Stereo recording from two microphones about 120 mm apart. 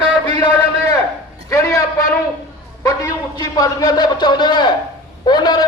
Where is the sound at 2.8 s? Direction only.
30° left (ahead or behind).